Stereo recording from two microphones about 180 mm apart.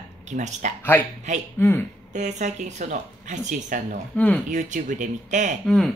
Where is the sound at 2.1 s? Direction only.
40° right (ahead or behind).